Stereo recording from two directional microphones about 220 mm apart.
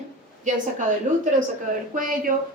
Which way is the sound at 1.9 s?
40° right (ahead or behind).